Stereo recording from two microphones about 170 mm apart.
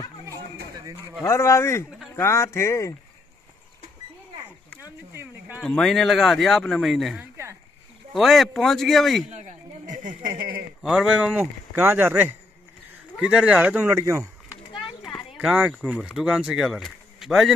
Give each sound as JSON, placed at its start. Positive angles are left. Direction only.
{"t": 1.2, "sound": "speech", "side_deg": 15}
{"t": 4.8, "sound": "a sound", "side_deg": -10}
{"t": 5.6, "sound": "speech", "side_deg": 0}
{"t": 9.3, "sound": "a sound", "side_deg": -45}
{"t": 10.8, "sound": "speech", "side_deg": -5}
{"t": 14.8, "sound": "children playing", "side_deg": 0}
{"t": 15.3, "sound": "speech", "side_deg": -5}